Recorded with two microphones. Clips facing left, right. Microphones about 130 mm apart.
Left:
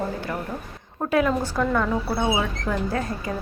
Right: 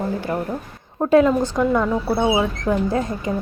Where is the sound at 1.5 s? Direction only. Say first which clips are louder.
Right 4 dB; 15° right (ahead or behind).